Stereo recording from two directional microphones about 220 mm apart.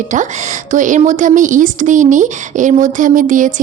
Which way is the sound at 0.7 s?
35° right (ahead or behind).